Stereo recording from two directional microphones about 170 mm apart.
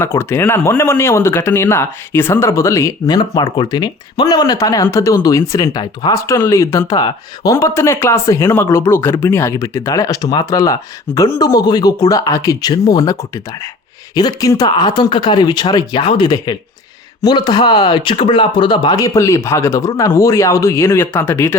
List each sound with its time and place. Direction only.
0.0 s speech: 15° left (ahead or behind)